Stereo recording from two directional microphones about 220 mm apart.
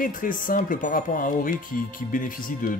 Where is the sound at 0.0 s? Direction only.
40° left (ahead or behind).